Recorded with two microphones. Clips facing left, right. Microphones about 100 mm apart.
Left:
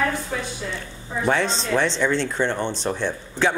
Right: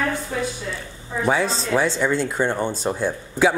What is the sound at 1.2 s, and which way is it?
Speech, 5° right (ahead or behind).